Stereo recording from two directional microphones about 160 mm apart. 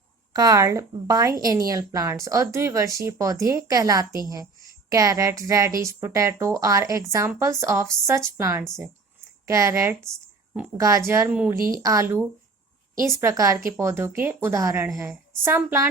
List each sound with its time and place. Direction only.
0.3 s a woman's voice: 25° right (ahead or behind)
11.8 s a woman's voice: 20° right (ahead or behind)